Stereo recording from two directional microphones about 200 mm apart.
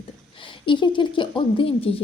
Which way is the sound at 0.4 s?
25° left (ahead or behind).